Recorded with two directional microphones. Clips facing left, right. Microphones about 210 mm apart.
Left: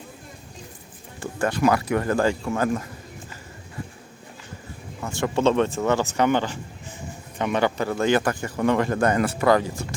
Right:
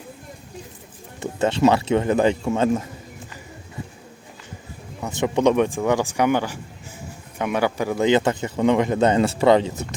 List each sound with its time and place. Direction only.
1.2 s a man's voice: 25° right (ahead or behind)
5.0 s a man's voice: 20° right (ahead or behind)